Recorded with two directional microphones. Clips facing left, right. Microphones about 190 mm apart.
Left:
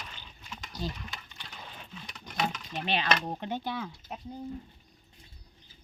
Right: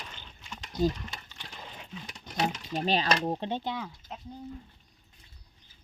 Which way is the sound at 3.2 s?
25° right (ahead or behind).